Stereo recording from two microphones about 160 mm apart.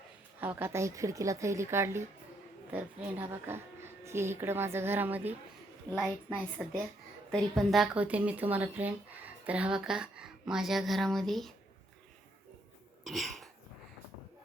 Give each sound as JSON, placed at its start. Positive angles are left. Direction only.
{"t": 0.3, "sound": "a woman's voice", "side_deg": -15}
{"t": 6.0, "sound": "a woman's voice", "side_deg": 5}
{"t": 13.1, "sound": "throat clearing", "side_deg": 0}